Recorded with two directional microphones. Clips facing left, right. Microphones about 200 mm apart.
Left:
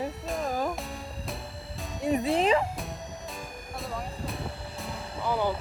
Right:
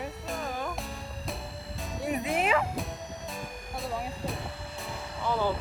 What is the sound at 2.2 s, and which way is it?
Speech, 30° left (ahead or behind).